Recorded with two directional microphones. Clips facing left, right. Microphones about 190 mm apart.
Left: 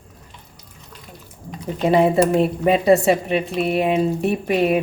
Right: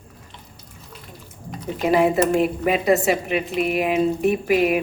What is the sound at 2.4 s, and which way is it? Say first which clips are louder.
Speech: left 3 dB; 30° left (ahead or behind).